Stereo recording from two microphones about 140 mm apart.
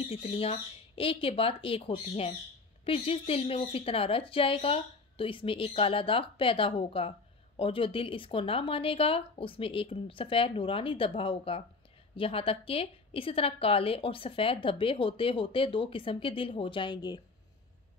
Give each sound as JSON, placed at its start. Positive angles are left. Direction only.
{"t": 0.1, "sound": "a woman's voice", "side_deg": 45}